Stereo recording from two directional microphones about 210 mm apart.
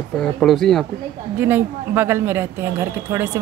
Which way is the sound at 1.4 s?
10° right (ahead or behind).